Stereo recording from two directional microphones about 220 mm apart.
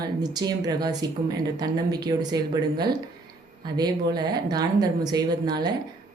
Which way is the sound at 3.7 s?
20° right (ahead or behind).